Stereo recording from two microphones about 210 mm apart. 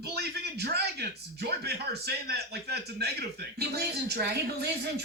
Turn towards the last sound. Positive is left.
turn(degrees=-50)  # may be behind; listen again after turning